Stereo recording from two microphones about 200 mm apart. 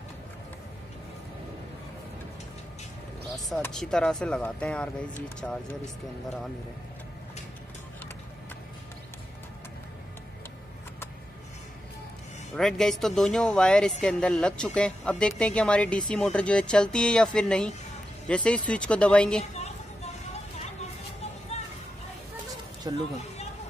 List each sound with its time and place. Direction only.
3.3 s a woman's voice: centre (ahead or behind)
12.5 s a woman's voice: centre (ahead or behind)
19.5 s a sound: 30° left (ahead or behind)
20.5 s vehicle: 35° left (ahead or behind)
22.8 s speech: 20° right (ahead or behind)